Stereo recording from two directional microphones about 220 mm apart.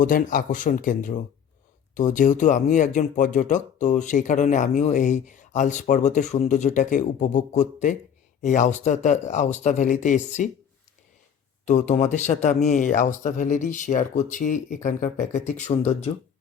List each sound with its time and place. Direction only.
0.0 s speech: 40° left (ahead or behind)
11.6 s speech: 35° left (ahead or behind)